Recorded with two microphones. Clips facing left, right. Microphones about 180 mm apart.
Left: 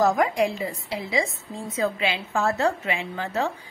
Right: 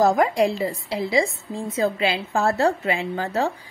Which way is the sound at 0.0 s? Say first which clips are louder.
Right 3 dB; 35° right (ahead or behind).